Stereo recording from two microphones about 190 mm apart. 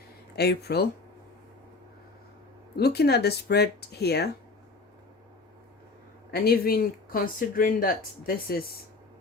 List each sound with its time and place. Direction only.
0.3 s speech: 60° left (ahead or behind)
2.7 s speech: 60° left (ahead or behind)
6.3 s speech: 55° left (ahead or behind)